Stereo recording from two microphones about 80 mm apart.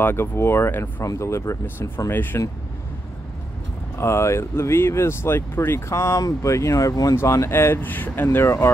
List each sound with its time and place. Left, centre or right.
0.0 s speech: left
1.0 s speech: left
4.0 s speech: left
7.2 s speech: left